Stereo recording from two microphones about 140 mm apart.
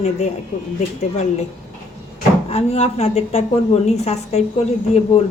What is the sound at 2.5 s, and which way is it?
A woman's voice, 50° left (ahead or behind).